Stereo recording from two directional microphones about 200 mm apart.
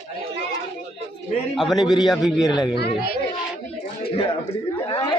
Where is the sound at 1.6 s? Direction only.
Centre (ahead or behind).